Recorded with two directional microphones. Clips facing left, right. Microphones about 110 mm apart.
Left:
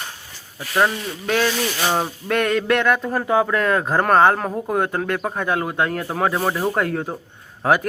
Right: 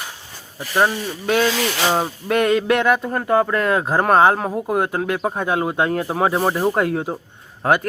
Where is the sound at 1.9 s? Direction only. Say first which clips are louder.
Right 2 dB; 10° right (ahead or behind).